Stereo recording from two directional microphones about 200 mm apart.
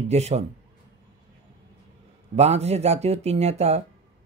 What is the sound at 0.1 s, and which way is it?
Speech, 30° right (ahead or behind).